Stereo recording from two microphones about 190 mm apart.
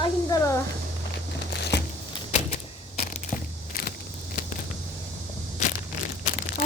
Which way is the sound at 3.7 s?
50° left (ahead or behind).